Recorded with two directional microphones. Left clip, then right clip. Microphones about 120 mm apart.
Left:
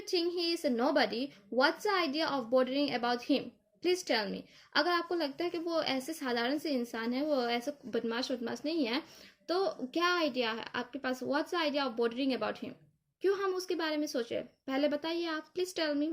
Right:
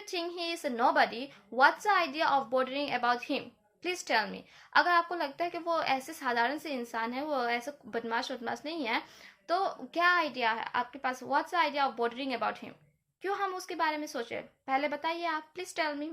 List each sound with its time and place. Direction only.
0.1 s a woman's voice: 40° left (ahead or behind)